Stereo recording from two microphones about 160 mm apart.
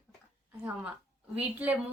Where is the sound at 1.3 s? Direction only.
10° right (ahead or behind).